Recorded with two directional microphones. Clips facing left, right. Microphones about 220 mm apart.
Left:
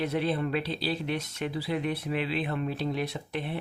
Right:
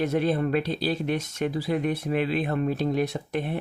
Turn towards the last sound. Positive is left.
turn(degrees=-45)  # may be behind; listen again after turning